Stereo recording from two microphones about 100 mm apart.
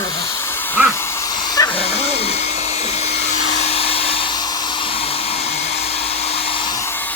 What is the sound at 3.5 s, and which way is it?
Hair dryer, 90° left.